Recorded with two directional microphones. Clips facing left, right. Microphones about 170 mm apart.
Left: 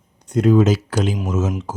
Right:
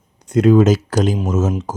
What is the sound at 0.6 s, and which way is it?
Speech, 45° right (ahead or behind).